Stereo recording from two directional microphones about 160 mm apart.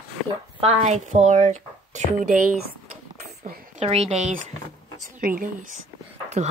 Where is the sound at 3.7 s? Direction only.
40° right (ahead or behind).